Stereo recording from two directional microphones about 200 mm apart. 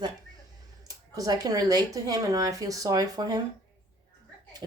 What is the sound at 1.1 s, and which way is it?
Speech, 20° right (ahead or behind).